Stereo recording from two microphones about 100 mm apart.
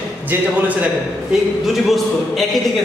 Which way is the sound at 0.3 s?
15° right (ahead or behind).